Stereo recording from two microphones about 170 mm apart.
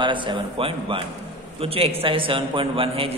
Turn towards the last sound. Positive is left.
turn(degrees=-35)  # may be behind; listen again after turning